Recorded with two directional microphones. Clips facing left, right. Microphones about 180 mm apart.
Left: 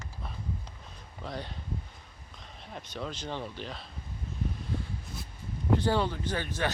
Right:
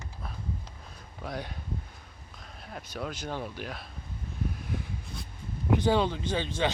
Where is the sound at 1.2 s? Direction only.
10° right (ahead or behind).